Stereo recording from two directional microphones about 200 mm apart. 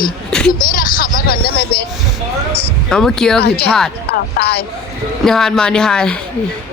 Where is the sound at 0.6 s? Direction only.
45° left (ahead or behind).